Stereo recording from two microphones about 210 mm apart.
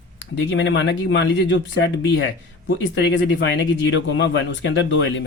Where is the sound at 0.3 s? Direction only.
60° left (ahead or behind).